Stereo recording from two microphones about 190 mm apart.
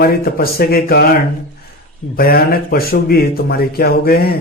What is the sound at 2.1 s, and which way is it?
A man's voice, 50° left (ahead or behind).